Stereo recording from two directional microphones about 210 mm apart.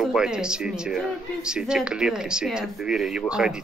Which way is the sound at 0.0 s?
5° right (ahead or behind).